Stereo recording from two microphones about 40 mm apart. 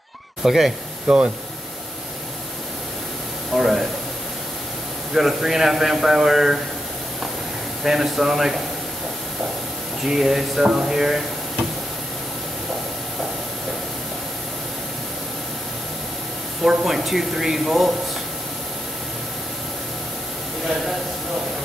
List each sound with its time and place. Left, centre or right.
0.4 s speech: centre
1.0 s speech: right
3.5 s speech: centre
5.1 s a man's voice: centre
7.8 s a man's voice: centre
10.0 s a man's voice: centre
16.6 s speech: centre